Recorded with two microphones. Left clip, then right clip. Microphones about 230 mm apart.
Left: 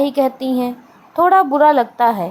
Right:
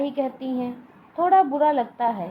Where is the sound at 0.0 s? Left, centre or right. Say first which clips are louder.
Left 10 dB; left.